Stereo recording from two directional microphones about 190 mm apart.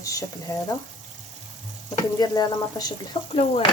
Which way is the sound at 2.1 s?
20° left (ahead or behind).